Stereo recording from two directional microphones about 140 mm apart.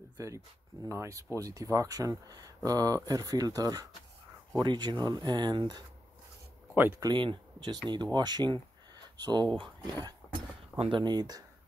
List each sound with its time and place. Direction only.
0.2 s speech: 20° right (ahead or behind)
6.7 s speech: 15° right (ahead or behind)
7.0 s speech: 35° right (ahead or behind)